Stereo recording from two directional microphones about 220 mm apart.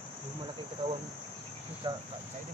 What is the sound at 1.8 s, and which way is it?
Cricket, 20° right (ahead or behind).